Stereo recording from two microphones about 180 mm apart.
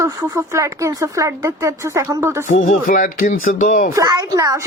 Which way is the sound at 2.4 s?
45° left (ahead or behind).